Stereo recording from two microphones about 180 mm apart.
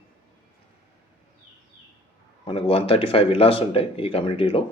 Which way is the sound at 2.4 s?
30° left (ahead or behind).